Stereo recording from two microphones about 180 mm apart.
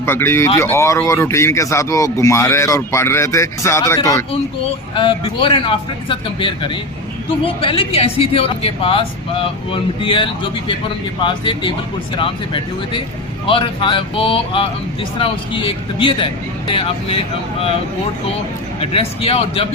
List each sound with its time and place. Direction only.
0.0 s speech: 15° left (ahead or behind)
4.9 s speech: 30° left (ahead or behind)
18.8 s speech: 30° left (ahead or behind)